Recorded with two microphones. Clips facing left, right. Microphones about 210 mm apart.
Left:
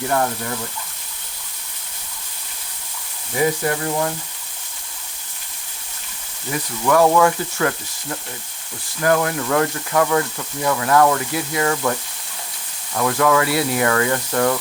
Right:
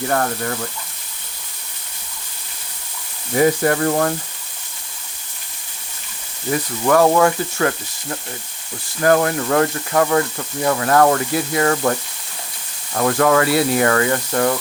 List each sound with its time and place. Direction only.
3.3 s speech: 50° right (ahead or behind)
6.5 s speech: 30° right (ahead or behind)
9.0 s speech: 35° right (ahead or behind)